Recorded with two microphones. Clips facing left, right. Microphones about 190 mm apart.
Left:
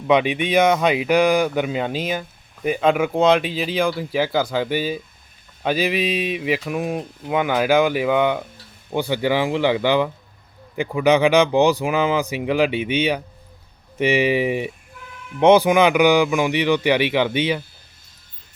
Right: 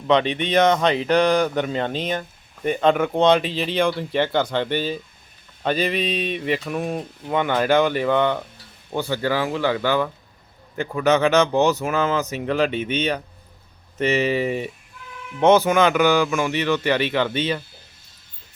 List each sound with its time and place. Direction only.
0.1 s mantra: 10° left (ahead or behind)
2.6 s speech: 5° left (ahead or behind)
5.6 s mantra: 5° left (ahead or behind)